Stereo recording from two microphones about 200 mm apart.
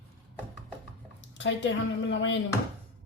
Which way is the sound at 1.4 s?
70° left (ahead or behind).